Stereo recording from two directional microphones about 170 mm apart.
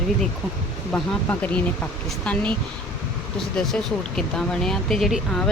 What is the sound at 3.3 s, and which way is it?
Speech, centre (ahead or behind).